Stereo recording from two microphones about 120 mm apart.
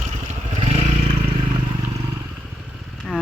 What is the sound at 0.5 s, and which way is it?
Vehicle, 55° right (ahead or behind).